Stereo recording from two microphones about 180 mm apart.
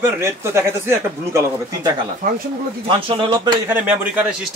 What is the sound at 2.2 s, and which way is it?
Speech, 50° right (ahead or behind).